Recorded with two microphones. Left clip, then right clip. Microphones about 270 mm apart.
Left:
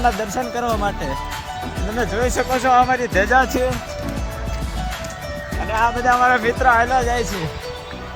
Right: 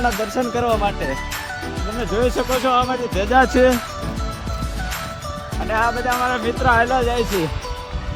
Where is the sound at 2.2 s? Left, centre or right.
Centre.